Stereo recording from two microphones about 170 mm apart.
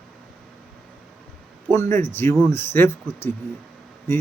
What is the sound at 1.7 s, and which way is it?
Speech, 15° left (ahead or behind).